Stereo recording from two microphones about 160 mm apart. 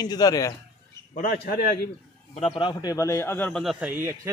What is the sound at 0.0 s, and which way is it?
Speech, 25° left (ahead or behind).